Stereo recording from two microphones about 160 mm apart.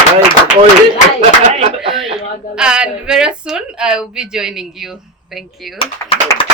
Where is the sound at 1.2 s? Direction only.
40° right (ahead or behind).